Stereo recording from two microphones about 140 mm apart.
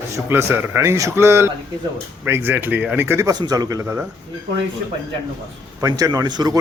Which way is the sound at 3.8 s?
15° right (ahead or behind).